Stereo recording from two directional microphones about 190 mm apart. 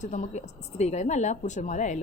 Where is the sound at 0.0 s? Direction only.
40° left (ahead or behind).